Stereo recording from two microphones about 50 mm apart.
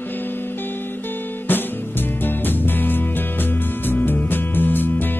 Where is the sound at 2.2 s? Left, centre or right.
Left.